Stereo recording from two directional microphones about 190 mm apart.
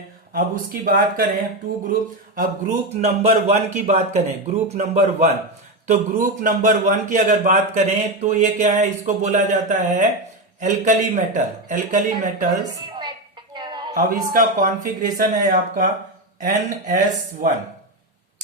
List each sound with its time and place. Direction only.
0.3 s a man's voice: 50° right (ahead or behind)
12.5 s a woman's voice: 20° right (ahead or behind)
13.5 s a sound: 20° right (ahead or behind)
13.9 s speech: 45° right (ahead or behind)